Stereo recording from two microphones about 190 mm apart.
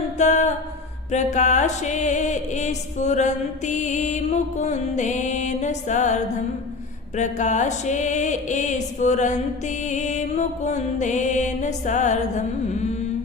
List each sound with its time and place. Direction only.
0.2 s music: 40° left (ahead or behind)
7.2 s music: 40° left (ahead or behind)